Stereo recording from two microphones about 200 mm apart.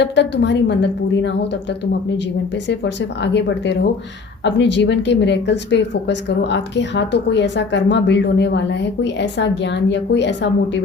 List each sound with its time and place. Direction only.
0.0 s a woman's voice: 60° left (ahead or behind)
2.6 s a woman's voice: 60° left (ahead or behind)